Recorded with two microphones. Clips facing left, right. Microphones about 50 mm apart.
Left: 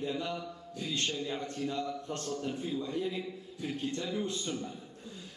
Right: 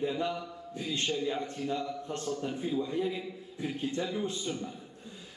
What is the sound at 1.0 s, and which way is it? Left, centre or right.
A man's voice, centre.